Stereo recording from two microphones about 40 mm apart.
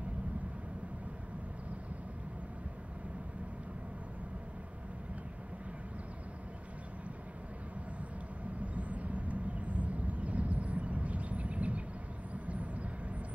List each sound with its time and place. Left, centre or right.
8.7 s vehicle: right